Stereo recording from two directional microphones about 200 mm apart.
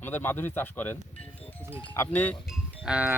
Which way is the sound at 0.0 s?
10° left (ahead or behind).